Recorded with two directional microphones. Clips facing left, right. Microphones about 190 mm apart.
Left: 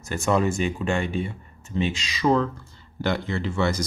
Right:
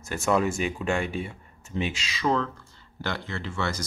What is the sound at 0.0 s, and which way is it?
Speech, 5° right (ahead or behind).